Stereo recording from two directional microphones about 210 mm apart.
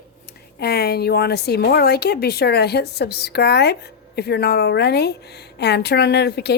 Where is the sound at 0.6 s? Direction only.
50° left (ahead or behind).